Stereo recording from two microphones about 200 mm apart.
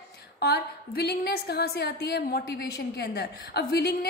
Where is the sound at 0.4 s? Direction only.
55° left (ahead or behind).